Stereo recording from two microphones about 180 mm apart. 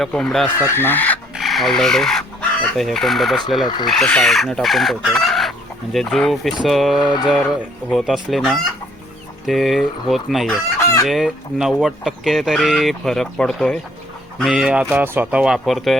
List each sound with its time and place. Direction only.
0.0 s speech: centre (ahead or behind)
0.6 s chicken: 15° left (ahead or behind)
3.8 s speech: 5° left (ahead or behind)
7.1 s speech: 25° left (ahead or behind)
7.9 s speech: centre (ahead or behind)